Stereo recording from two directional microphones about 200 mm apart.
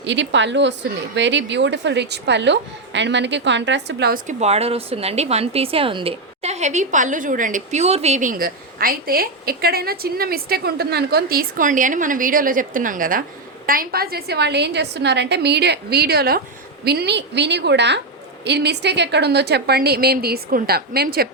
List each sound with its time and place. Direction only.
0.0 s a woman's voice: 65° right (ahead or behind)
4.3 s a woman's voice: 30° right (ahead or behind); by 21.2 s 50° right (ahead or behind)